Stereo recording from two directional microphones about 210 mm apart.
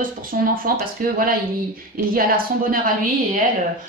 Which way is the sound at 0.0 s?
40° right (ahead or behind).